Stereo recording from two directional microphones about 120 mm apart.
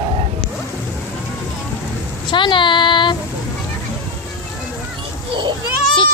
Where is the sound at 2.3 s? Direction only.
40° left (ahead or behind).